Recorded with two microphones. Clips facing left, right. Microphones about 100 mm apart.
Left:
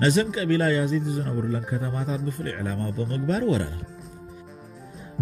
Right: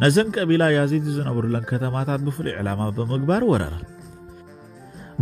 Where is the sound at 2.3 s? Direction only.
50° right (ahead or behind).